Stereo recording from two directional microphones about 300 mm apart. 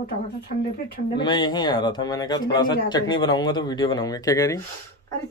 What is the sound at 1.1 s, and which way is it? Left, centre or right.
Speech, centre.